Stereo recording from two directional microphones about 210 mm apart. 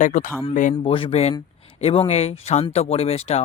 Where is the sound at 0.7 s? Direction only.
25° left (ahead or behind).